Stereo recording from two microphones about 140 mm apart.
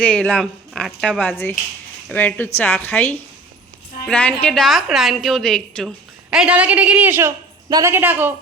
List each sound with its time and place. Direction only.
0.0 s a woman's voice: 5° left (ahead or behind)
6.3 s a woman's voice: 10° right (ahead or behind)